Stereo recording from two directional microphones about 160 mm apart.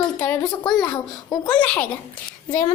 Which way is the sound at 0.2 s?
10° left (ahead or behind).